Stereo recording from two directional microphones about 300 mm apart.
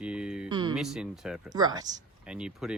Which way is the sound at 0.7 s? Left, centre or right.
Centre.